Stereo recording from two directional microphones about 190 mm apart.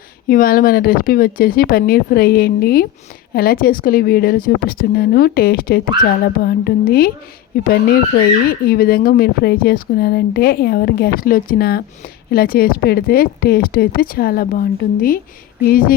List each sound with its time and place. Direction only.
0.3 s speech: 50° left (ahead or behind)